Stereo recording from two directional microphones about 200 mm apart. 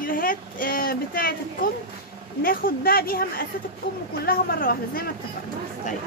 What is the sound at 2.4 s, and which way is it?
Speech, 45° left (ahead or behind).